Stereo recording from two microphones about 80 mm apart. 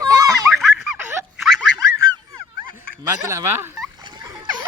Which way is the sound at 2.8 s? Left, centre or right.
Right.